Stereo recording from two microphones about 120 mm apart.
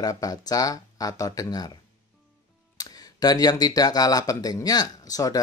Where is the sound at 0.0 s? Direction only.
30° left (ahead or behind).